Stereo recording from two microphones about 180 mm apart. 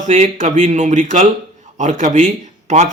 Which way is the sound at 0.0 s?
45° right (ahead or behind).